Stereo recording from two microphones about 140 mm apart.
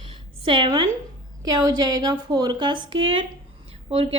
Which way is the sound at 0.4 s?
35° right (ahead or behind).